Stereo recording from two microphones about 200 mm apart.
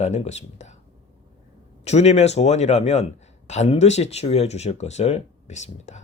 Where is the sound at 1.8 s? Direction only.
35° left (ahead or behind).